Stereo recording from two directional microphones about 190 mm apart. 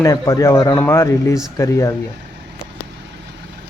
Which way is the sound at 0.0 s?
15° left (ahead or behind).